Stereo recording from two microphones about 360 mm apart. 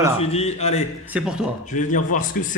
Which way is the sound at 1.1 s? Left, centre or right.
Centre.